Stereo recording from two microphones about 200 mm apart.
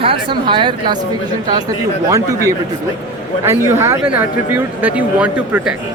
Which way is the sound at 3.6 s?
15° right (ahead or behind).